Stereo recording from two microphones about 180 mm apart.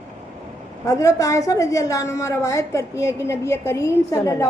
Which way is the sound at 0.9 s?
15° left (ahead or behind).